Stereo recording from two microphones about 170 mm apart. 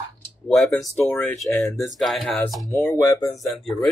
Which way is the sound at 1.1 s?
10° left (ahead or behind).